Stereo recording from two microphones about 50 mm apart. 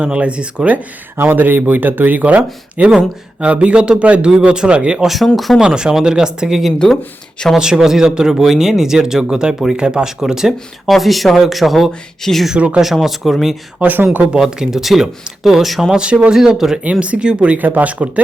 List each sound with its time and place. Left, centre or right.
0.0 s speech: right
1.2 s speech: right; by 4.8 s centre
5.0 s speech: centre
5.5 s speech: centre
12.5 s speech: right
12.8 s speech: centre
13.7 s speech: right
14.4 s speech: centre
16.0 s speech: right
16.4 s speech: centre
16.8 s speech: right
17.6 s speech: right